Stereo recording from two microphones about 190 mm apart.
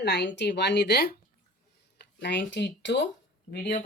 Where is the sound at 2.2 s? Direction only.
70° left (ahead or behind).